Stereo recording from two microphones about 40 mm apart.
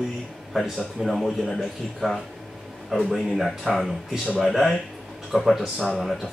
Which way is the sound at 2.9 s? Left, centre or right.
Centre.